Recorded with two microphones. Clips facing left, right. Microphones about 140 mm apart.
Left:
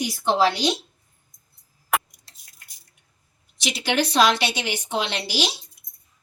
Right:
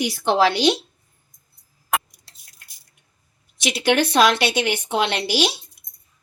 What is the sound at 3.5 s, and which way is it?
A woman's voice, 60° right (ahead or behind).